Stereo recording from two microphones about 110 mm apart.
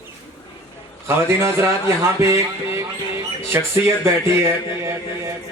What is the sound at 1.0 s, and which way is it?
Speech, 25° right (ahead or behind).